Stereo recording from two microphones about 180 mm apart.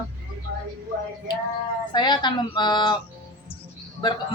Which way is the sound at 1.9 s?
25° left (ahead or behind).